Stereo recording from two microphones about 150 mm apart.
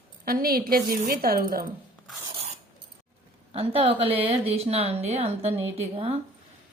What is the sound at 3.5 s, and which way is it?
Speech, 40° right (ahead or behind).